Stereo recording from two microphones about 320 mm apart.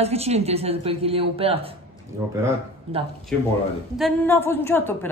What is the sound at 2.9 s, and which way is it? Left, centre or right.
Speech, centre.